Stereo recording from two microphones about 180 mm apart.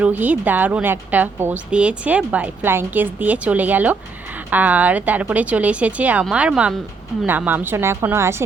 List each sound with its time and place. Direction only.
0.0 s a woman's voice: 10° right (ahead or behind)